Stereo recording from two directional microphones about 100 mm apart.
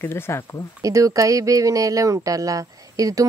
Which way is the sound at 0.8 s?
35° right (ahead or behind).